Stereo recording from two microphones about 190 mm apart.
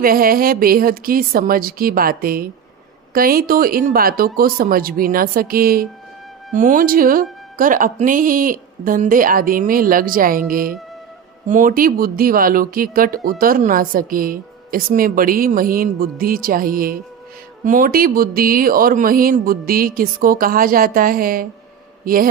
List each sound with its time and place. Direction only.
0.0 s speech: 50° right (ahead or behind)
22.0 s mantra: 50° right (ahead or behind)